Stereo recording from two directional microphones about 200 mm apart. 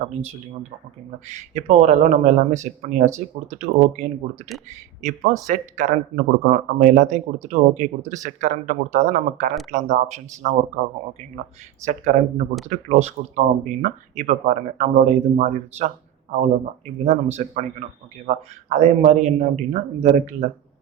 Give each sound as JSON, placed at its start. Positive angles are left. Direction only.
{"t": 1.3, "sound": "speech", "side_deg": -35}
{"t": 11.9, "sound": "speech", "side_deg": -35}